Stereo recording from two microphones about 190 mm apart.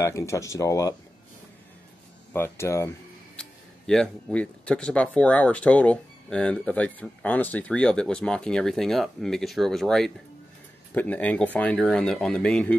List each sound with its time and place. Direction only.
0.0 s speech: 15° left (ahead or behind)
2.3 s speech: 15° left (ahead or behind)
3.3 s speech: 5° left (ahead or behind)